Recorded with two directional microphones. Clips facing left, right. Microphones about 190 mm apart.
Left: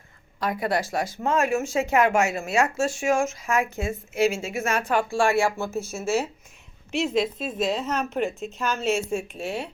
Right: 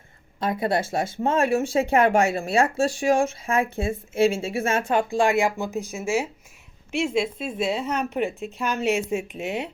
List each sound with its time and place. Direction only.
0.3 s a woman's voice: 25° right (ahead or behind)